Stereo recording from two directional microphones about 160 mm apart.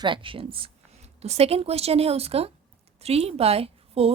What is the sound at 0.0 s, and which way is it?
A woman's voice, 30° right (ahead or behind).